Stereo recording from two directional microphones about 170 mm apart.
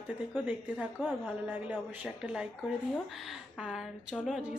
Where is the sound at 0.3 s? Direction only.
5° right (ahead or behind).